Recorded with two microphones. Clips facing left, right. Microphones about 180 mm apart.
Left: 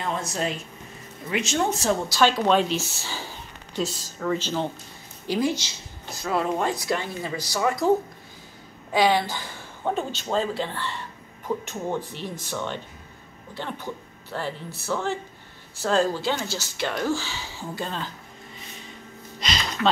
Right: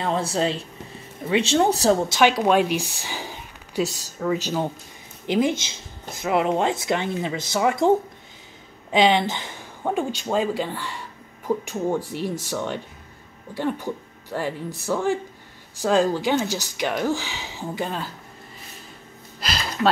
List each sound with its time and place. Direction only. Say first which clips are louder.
0.0 s speech: right 5 dB; 30° right (ahead or behind)
2.0 s speech: right 2 dB; 15° right (ahead or behind)
5.2 s a woman's voice: right 3 dB; 20° right (ahead or behind)
8.9 s speech: right 2 dB; 20° right (ahead or behind)
19.4 s a sound: right 2 dB; 5° right (ahead or behind)